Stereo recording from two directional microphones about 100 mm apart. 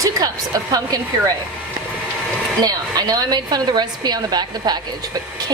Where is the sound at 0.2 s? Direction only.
35° right (ahead or behind).